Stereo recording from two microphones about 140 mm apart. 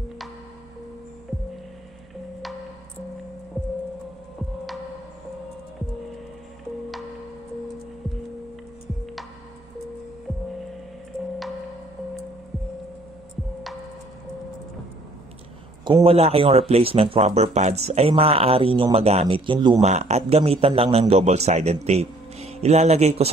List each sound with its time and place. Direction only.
15.8 s speech: 40° right (ahead or behind)
19.8 s speech: 50° right (ahead or behind)